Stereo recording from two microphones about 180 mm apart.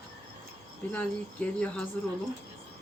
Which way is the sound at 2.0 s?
5° left (ahead or behind).